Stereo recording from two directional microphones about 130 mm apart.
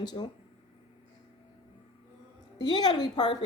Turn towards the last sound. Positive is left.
turn(degrees=35)  # may be behind; listen again after turning